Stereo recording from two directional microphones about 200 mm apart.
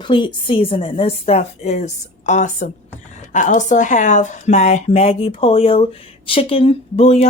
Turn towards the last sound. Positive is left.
turn(degrees=30)  # may be behind; listen again after turning